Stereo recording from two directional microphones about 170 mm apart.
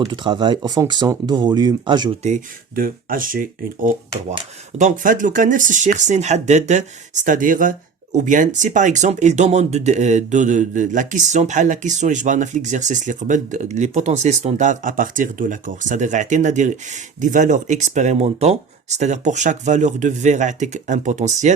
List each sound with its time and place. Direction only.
0.0 s speech: 25° right (ahead or behind)
2.2 s speech: 50° right (ahead or behind)